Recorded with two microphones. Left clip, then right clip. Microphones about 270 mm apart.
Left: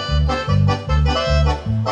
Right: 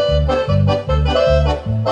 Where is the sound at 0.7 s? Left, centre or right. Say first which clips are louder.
Right 4 dB; left.